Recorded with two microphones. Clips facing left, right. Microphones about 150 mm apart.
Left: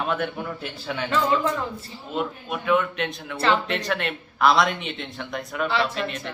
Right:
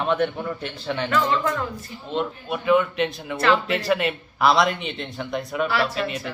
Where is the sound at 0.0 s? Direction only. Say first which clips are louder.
Right 4 dB; centre (ahead or behind).